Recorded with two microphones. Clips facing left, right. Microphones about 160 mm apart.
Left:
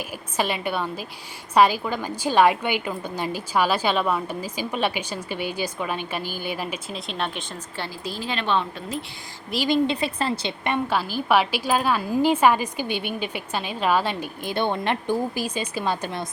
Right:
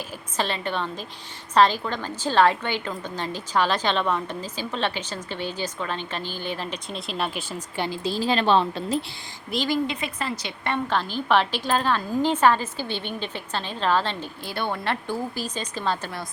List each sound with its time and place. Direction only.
0.3 s a woman's voice: 10° left (ahead or behind)
6.9 s speech: centre (ahead or behind)
7.8 s a woman's voice: 25° right (ahead or behind)
9.6 s a woman's voice: 25° left (ahead or behind)
10.6 s a woman's voice: 10° left (ahead or behind)